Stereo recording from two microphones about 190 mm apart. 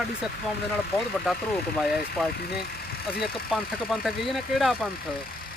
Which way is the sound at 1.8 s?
Centre (ahead or behind).